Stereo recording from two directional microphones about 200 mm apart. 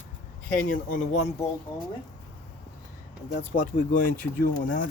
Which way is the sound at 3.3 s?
45° left (ahead or behind).